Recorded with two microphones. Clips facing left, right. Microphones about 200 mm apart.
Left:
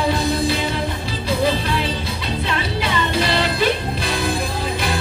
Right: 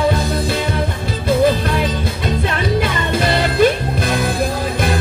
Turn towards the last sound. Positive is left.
turn(degrees=-50)  # may be behind; listen again after turning